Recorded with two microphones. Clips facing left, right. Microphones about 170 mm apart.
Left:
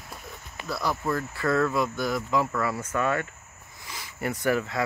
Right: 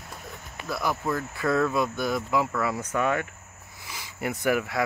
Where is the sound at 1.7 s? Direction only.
20° right (ahead or behind).